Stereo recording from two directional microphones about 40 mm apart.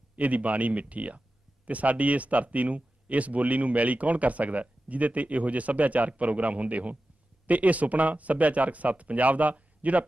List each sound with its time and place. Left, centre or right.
0.1 s speech: right